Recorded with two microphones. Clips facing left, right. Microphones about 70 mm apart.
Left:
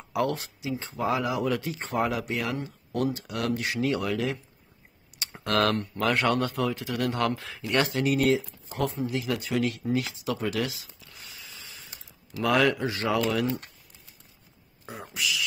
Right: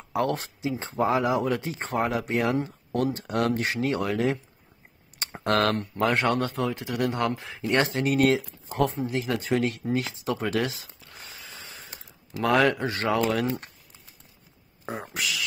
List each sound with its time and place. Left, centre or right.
0.1 s speech: right
8.2 s speech: right
8.6 s speech: right
9.9 s a sound: right
12.8 s speech: right
15.1 s speech: right